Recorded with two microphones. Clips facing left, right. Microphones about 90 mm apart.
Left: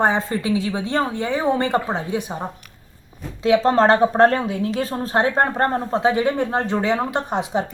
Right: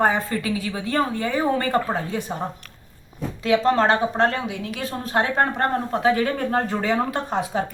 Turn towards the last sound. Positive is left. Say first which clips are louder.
# left 2 dB
turn(degrees=20)  # may be behind; listen again after turning